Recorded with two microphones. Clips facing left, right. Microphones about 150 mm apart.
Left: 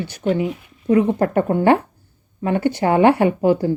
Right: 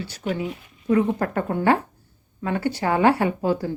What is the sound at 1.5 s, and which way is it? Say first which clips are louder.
A woman's voice: left 2 dB; 20° left (ahead or behind).